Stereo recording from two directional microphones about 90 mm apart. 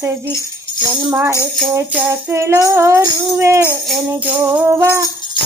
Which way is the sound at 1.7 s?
30° right (ahead or behind).